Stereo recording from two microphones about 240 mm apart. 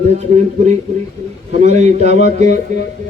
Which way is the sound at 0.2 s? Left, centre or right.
Right.